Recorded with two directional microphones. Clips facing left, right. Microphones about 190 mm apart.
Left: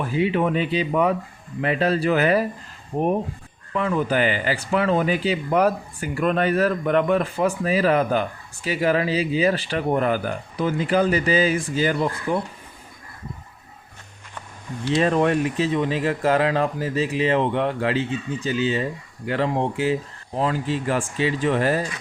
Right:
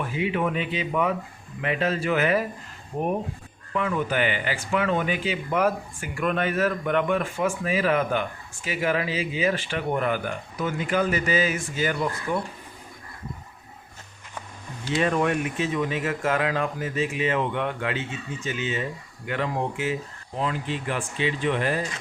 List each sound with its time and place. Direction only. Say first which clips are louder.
0.0 s speech: left 4 dB; 35° left (ahead or behind)
3.8 s speech: left 3 dB; 35° left (ahead or behind)
15.0 s speech: left 3 dB; 35° left (ahead or behind)